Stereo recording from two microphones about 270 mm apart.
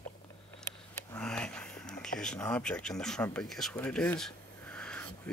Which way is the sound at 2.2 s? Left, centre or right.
Centre.